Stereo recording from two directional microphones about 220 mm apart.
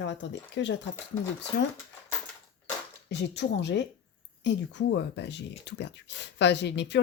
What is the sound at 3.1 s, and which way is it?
Speech, 50° left (ahead or behind).